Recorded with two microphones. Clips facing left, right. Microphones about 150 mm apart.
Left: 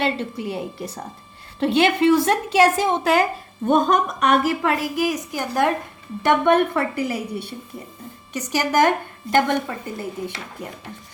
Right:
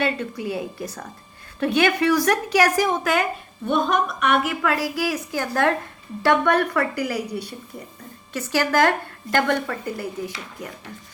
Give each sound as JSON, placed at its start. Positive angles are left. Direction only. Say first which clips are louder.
{"t": 0.0, "sound": "a woman's voice", "louder": "left 1 dB", "side_deg": 25}
{"t": 3.7, "sound": "a woman's voice", "louder": "left 3 dB", "side_deg": 40}